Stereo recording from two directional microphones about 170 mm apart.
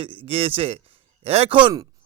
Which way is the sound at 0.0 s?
30° right (ahead or behind).